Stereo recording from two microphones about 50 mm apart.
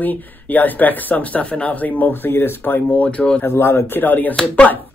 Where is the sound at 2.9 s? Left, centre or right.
Left.